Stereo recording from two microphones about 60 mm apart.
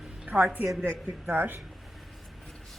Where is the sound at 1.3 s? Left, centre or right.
Right.